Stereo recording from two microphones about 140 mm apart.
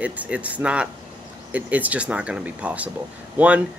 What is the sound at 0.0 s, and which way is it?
Speech, 10° right (ahead or behind).